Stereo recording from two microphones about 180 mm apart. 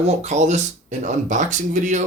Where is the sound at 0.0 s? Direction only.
40° right (ahead or behind).